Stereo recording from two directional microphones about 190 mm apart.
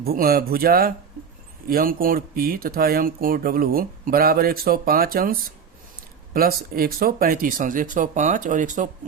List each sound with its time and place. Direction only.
0.0 s speech: 50° right (ahead or behind)